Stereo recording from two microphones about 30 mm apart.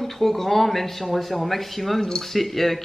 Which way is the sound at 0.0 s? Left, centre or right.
Centre.